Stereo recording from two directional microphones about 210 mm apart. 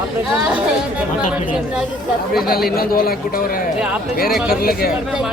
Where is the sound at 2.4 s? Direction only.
45° left (ahead or behind).